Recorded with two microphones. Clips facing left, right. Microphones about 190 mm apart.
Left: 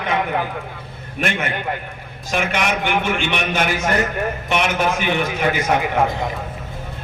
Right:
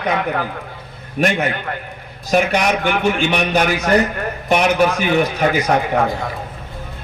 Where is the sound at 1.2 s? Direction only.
40° right (ahead or behind).